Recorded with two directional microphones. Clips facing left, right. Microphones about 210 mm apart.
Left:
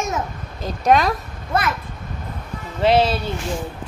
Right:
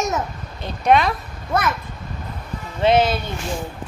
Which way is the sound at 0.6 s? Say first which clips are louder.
Even; 40° left (ahead or behind).